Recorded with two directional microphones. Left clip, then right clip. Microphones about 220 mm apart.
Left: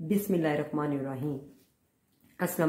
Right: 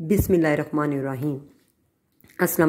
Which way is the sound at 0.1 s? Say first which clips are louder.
Right 8 dB; 35° right (ahead or behind).